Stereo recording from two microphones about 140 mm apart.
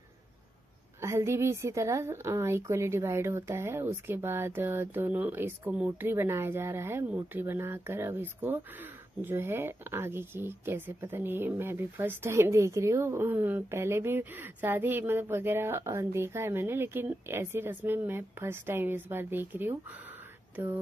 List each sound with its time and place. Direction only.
1.0 s speech: 20° right (ahead or behind)